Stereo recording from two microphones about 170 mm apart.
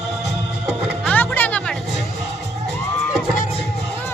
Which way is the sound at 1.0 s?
10° left (ahead or behind).